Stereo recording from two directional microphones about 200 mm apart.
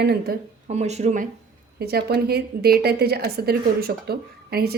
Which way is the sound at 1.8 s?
50° right (ahead or behind).